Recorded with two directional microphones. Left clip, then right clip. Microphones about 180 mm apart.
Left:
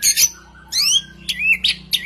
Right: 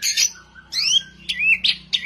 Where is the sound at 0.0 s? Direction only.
40° left (ahead or behind).